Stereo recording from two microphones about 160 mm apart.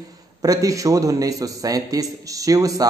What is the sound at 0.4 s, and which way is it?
A man's voice, 20° right (ahead or behind).